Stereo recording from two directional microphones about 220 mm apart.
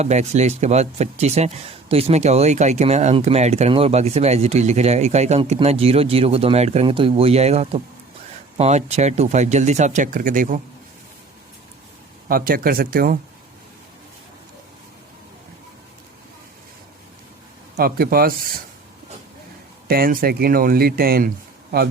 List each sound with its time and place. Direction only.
0.0 s speech: 30° right (ahead or behind)
12.3 s speech: 40° right (ahead or behind)
17.7 s speech: 45° right (ahead or behind)
19.9 s speech: 45° right (ahead or behind)